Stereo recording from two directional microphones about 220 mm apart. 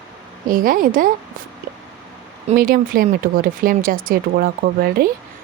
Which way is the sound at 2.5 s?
40° right (ahead or behind).